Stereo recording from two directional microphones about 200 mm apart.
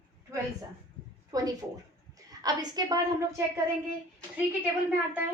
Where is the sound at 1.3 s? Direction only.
20° right (ahead or behind).